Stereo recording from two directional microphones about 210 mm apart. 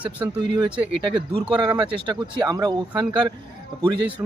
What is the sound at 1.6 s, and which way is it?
Speech, 20° right (ahead or behind).